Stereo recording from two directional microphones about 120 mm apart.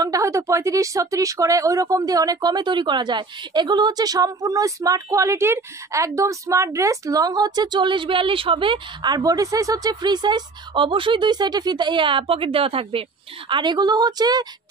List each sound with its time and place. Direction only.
0.0 s speech: 25° right (ahead or behind)